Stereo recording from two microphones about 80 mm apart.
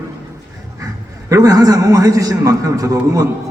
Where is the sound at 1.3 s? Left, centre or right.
Right.